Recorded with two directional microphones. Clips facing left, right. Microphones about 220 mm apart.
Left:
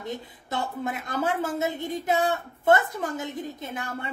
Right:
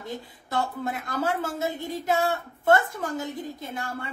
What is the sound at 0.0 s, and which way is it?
A woman's voice, 20° left (ahead or behind).